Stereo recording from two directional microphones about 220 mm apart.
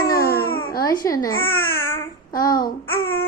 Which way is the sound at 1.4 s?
45° left (ahead or behind).